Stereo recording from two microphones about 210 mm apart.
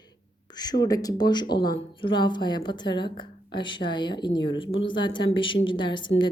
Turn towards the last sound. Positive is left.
turn(degrees=20)  # may be behind; listen again after turning